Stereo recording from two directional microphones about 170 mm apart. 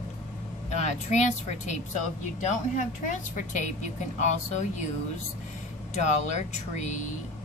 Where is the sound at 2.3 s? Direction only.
45° left (ahead or behind).